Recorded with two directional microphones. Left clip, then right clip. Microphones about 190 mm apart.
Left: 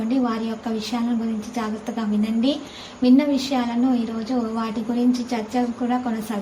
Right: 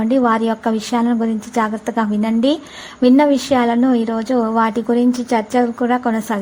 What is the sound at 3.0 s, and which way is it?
A woman's voice, 45° right (ahead or behind).